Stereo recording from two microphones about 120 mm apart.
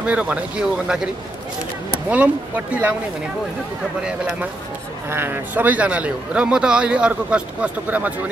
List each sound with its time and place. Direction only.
0.0 s a man's voice: 10° right (ahead or behind)
2.0 s a man's voice: 10° right (ahead or behind)
5.1 s a man's voice: 20° right (ahead or behind)